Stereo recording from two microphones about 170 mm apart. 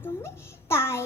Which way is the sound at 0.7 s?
15° left (ahead or behind).